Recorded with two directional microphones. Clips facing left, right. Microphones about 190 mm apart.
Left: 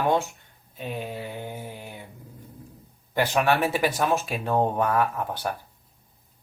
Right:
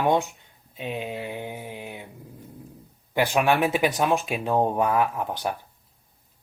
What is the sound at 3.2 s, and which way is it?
Speech, 15° right (ahead or behind).